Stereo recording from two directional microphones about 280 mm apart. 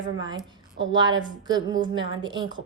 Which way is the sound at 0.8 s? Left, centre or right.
Centre.